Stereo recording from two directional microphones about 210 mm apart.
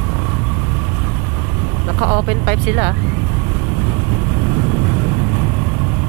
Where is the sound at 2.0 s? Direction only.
20° right (ahead or behind).